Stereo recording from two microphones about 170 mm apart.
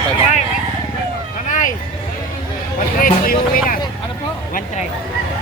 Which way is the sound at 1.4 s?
50° left (ahead or behind).